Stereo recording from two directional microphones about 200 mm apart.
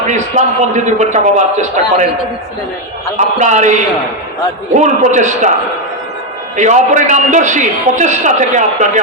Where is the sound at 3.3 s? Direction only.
35° right (ahead or behind).